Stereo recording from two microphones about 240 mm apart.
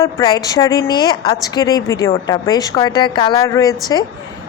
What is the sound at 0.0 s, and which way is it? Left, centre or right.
A woman's voice, centre.